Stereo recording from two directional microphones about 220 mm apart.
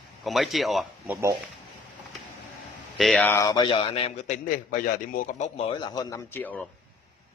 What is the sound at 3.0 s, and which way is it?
A man's voice, 5° left (ahead or behind).